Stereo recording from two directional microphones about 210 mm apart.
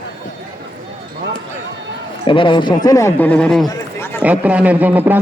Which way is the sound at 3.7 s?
10° left (ahead or behind).